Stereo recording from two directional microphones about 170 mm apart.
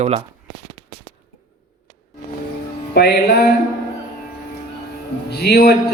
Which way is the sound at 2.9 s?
80° left.